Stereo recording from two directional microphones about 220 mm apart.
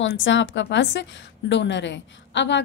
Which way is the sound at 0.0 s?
60° left (ahead or behind).